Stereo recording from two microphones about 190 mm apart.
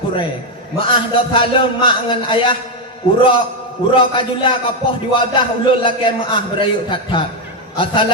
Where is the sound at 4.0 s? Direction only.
25° left (ahead or behind).